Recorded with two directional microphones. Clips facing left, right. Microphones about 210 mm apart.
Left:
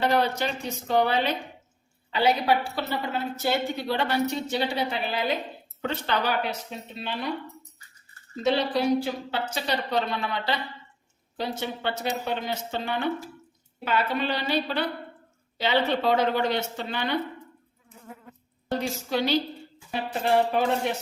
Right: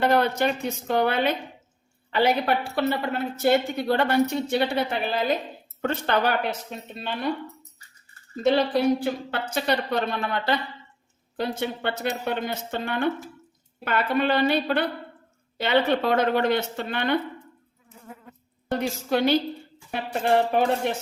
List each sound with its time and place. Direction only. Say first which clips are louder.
0.0 s a woman's voice: right 3 dB; 55° right (ahead or behind)
8.4 s a woman's voice: right 3 dB; 55° right (ahead or behind)
18.7 s a woman's voice: right 3 dB; 55° right (ahead or behind)